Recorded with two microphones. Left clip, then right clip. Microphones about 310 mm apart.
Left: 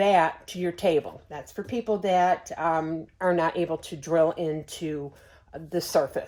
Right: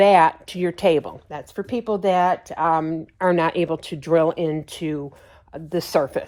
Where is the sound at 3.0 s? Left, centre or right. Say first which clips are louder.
Right 5 dB; centre.